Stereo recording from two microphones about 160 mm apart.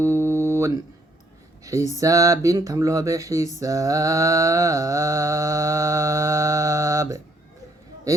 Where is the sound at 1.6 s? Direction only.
20° right (ahead or behind).